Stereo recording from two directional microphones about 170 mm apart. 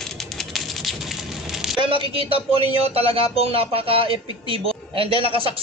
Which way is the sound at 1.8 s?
30° right (ahead or behind).